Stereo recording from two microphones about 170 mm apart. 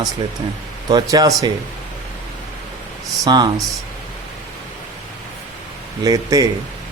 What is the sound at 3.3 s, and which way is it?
Speech, 25° right (ahead or behind).